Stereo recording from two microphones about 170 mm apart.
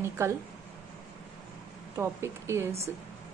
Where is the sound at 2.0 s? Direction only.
15° right (ahead or behind).